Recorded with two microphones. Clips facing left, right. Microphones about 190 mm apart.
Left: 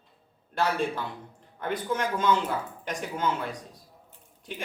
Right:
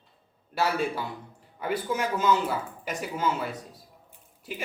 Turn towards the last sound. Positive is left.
turn(degrees=-5)  # may be behind; listen again after turning